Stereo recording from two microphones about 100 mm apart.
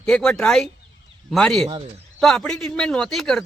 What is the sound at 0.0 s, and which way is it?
Speech, 5° left (ahead or behind).